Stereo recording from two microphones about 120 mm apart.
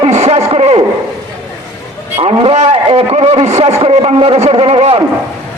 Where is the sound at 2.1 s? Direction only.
50° right (ahead or behind).